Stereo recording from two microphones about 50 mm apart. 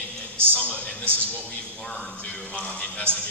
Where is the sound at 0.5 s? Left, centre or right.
Left.